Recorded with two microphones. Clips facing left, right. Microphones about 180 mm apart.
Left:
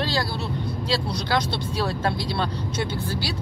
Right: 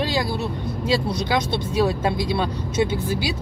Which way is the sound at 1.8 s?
15° right (ahead or behind).